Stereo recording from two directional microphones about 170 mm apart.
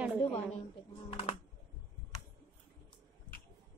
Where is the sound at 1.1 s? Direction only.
35° left (ahead or behind).